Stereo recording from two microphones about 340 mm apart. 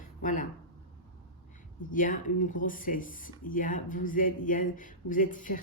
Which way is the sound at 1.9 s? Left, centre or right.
Left.